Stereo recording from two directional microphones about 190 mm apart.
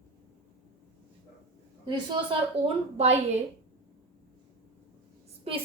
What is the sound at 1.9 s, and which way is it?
A woman's voice, 25° right (ahead or behind).